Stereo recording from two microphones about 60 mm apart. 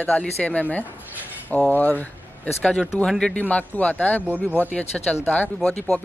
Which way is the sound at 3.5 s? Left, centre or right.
Left.